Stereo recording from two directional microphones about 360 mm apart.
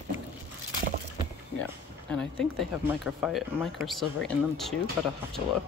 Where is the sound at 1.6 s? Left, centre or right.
Centre.